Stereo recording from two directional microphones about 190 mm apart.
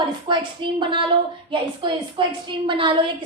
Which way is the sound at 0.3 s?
25° right (ahead or behind).